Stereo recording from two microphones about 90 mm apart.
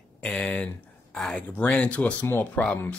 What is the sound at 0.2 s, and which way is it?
Speech, 10° left (ahead or behind).